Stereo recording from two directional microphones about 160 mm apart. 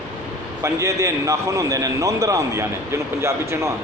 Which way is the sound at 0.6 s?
20° right (ahead or behind).